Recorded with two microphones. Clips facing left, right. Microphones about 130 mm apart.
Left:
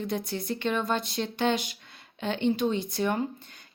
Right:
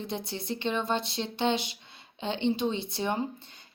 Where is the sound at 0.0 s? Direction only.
25° right (ahead or behind).